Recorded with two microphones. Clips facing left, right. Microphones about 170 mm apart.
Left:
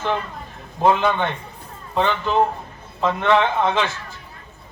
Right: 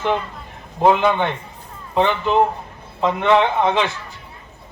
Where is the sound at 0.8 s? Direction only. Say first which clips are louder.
Right 2 dB; 15° right (ahead or behind).